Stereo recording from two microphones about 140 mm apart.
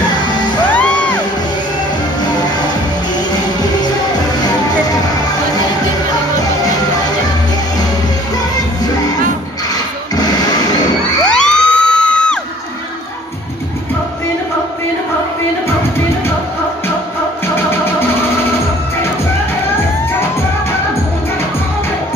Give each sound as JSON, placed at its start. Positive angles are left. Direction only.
{"t": 0.7, "sound": "music", "side_deg": 10}
{"t": 10.1, "sound": "a sound", "side_deg": 30}
{"t": 11.2, "sound": "music", "side_deg": 5}